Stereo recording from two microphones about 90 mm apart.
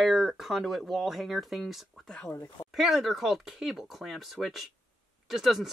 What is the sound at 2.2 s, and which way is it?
Speech, 25° left (ahead or behind).